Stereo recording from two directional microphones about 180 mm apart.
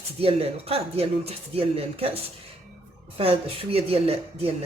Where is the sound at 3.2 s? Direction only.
35° right (ahead or behind).